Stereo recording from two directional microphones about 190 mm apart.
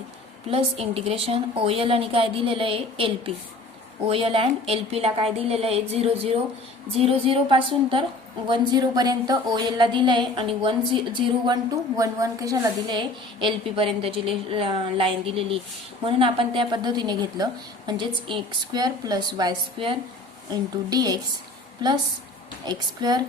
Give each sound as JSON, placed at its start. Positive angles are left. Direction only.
{"t": 0.5, "sound": "a woman's voice", "side_deg": -30}
{"t": 22.6, "sound": "a woman's voice", "side_deg": -20}